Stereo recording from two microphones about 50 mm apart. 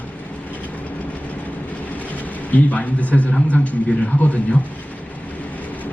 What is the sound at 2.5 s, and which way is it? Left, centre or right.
A man's voice, left.